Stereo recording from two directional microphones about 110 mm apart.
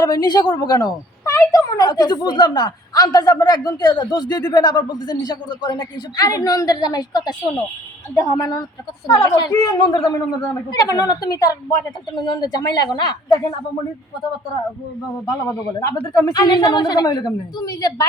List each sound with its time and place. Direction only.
0.0 s speech: 40° left (ahead or behind)
15.3 s speech: 35° left (ahead or behind)